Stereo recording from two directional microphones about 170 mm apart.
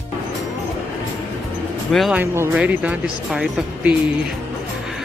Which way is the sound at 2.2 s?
15° right (ahead or behind).